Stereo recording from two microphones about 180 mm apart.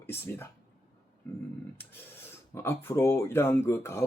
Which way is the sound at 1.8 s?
15° left (ahead or behind).